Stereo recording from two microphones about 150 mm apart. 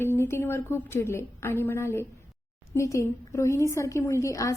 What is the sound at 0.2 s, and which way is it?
A woman's voice, 15° left (ahead or behind).